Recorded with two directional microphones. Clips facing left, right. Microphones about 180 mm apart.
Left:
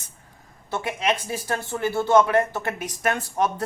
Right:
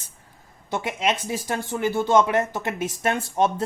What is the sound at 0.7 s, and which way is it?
Speech, 20° right (ahead or behind).